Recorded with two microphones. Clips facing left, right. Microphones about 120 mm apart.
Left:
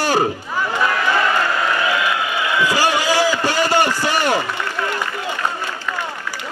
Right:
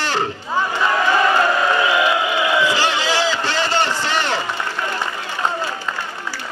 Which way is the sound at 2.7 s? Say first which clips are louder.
Left 2 dB; 10° left (ahead or behind).